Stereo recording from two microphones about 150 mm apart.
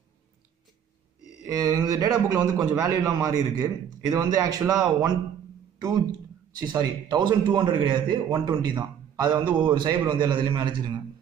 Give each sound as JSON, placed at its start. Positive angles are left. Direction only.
{"t": 1.4, "sound": "a man's voice", "side_deg": -25}